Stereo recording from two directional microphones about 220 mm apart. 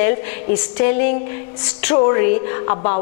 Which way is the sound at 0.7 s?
15° left (ahead or behind).